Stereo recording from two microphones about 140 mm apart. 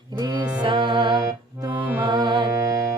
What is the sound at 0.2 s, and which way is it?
Music, 25° right (ahead or behind).